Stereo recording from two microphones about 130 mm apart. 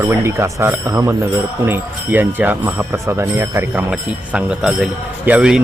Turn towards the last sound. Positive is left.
turn(degrees=-10)  # may be behind; listen again after turning